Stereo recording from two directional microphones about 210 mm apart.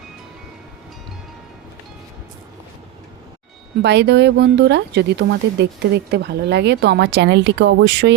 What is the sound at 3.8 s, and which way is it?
Speech, 55° right (ahead or behind).